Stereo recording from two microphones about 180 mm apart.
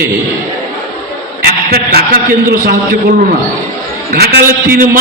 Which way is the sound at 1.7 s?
55° right (ahead or behind).